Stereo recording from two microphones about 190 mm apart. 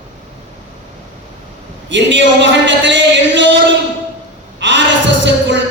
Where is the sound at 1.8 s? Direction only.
70° right (ahead or behind).